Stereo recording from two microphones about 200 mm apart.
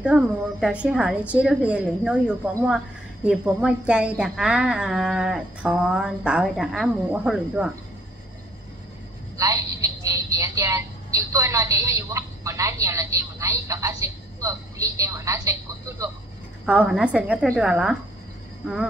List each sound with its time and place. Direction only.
0.0 s a woman's voice: 5° right (ahead or behind)
9.4 s a woman's voice: 15° right (ahead or behind)